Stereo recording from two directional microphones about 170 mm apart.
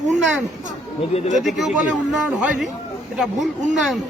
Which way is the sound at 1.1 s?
35° left (ahead or behind).